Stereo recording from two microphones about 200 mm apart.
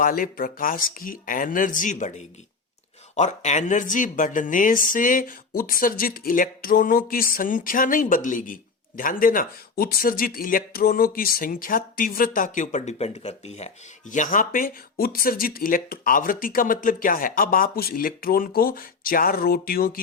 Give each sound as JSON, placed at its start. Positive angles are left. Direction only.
{"t": 0.0, "sound": "speech", "side_deg": 45}